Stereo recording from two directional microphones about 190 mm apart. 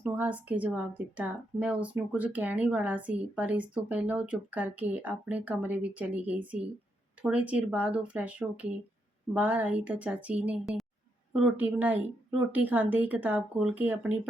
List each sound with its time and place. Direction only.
0.0 s a woman's voice: 10° right (ahead or behind)